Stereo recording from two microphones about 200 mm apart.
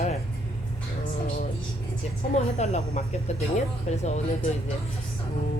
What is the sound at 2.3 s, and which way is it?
Speech, 35° left (ahead or behind).